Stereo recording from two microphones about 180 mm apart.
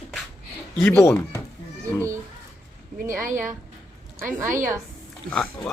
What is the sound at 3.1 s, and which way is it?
Speech, 45° right (ahead or behind).